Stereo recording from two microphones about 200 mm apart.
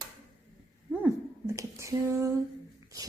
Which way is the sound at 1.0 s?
15° right (ahead or behind).